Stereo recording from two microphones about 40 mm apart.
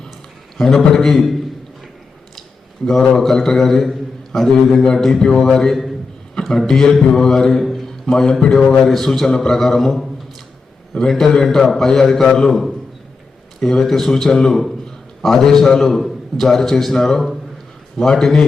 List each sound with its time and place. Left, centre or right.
0.5 s a man's voice: centre
3.0 s a man's voice: centre